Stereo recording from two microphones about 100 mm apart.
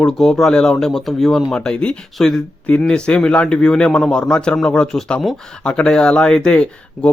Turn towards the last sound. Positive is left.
turn(degrees=10)  # may be behind; listen again after turning